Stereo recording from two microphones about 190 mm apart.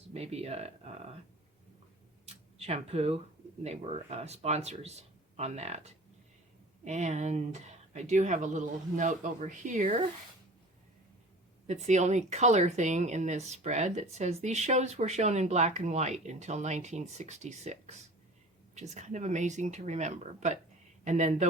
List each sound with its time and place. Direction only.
0.1 s speech: 35° right (ahead or behind)
2.2 s a sound: 35° right (ahead or behind)
3.6 s speech: 35° right (ahead or behind)
11.6 s speech: 35° right (ahead or behind)